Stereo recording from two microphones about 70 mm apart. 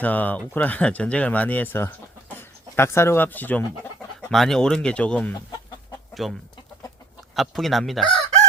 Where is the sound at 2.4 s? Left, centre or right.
Left.